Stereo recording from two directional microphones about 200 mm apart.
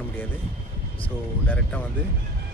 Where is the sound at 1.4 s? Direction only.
5° left (ahead or behind).